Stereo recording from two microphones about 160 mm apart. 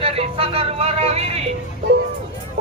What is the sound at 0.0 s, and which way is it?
Music, 35° right (ahead or behind).